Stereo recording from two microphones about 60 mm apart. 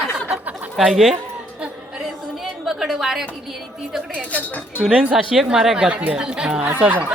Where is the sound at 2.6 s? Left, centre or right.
Centre.